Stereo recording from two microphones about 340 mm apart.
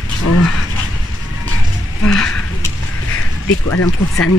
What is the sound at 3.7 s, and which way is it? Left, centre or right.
Speech, left.